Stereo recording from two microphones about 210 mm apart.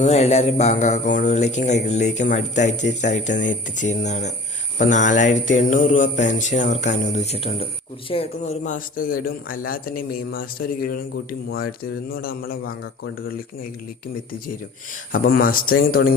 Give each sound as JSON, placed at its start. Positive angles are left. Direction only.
{"t": 0.0, "sound": "mantra", "side_deg": 30}
{"t": 8.1, "sound": "a man's voice", "side_deg": 30}
{"t": 15.4, "sound": "a man's voice", "side_deg": 45}